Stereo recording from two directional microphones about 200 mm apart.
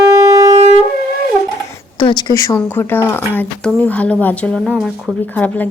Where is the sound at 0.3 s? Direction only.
15° right (ahead or behind).